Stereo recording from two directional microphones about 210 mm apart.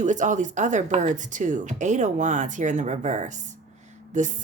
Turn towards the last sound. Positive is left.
turn(degrees=-35)  # may be behind; listen again after turning